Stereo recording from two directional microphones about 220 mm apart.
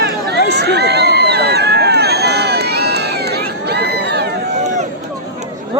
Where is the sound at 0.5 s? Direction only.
50° right (ahead or behind).